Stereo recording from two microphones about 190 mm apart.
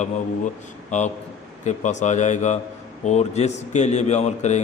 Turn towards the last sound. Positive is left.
turn(degrees=35)  # may be behind; listen again after turning